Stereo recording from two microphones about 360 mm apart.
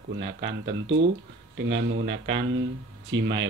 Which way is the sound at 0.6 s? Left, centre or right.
Right.